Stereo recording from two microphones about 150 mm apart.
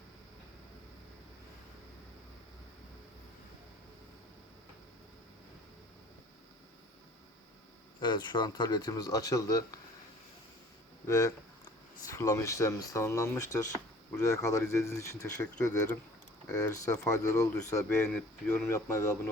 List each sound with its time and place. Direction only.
8.0 s speech: 30° left (ahead or behind)
11.0 s speech: 20° left (ahead or behind)